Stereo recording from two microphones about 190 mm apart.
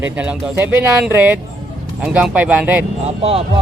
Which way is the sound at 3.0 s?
30° right (ahead or behind).